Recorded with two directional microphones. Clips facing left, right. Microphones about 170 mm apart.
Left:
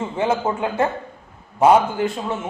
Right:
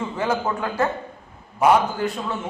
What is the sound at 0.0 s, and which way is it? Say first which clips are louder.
A man's voice: left 3 dB; 25° left (ahead or behind).